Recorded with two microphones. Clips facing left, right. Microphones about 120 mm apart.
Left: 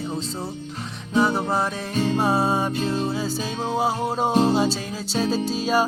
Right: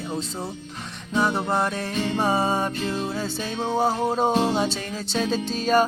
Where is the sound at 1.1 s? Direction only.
5° left (ahead or behind).